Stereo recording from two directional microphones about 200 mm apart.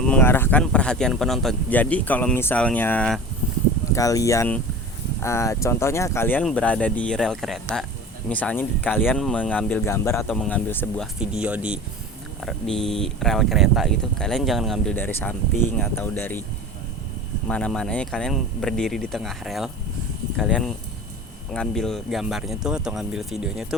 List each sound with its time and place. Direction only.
0.1 s speech: 10° left (ahead or behind)
17.5 s speech: 5° left (ahead or behind)